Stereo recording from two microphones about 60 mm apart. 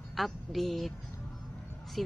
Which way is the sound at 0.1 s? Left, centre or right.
Centre.